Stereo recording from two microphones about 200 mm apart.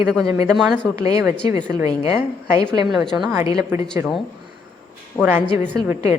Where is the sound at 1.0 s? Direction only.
15° right (ahead or behind).